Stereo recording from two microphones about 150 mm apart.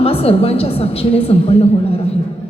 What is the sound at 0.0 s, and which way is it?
A woman's voice, 40° left (ahead or behind).